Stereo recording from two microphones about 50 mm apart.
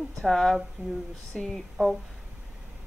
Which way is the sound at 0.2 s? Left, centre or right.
Centre.